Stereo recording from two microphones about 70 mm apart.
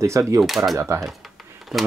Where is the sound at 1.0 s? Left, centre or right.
Centre.